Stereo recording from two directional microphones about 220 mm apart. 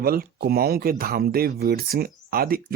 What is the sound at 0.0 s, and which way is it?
Speech, 45° right (ahead or behind).